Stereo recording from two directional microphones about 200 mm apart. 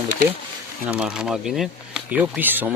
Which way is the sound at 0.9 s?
5° right (ahead or behind).